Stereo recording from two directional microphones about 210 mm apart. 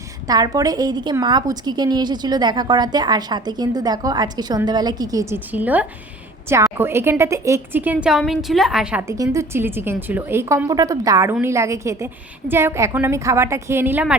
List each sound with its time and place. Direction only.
0.3 s a woman's voice: 20° right (ahead or behind)